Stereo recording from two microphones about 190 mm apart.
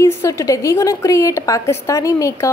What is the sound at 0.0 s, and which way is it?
Speech, 15° left (ahead or behind).